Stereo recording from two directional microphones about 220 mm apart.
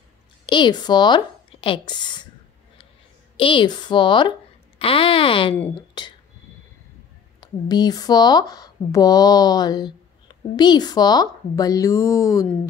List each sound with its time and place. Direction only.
0.5 s speech: 20° left (ahead or behind)
3.3 s speech: 25° left (ahead or behind)
7.3 s speech: 20° left (ahead or behind)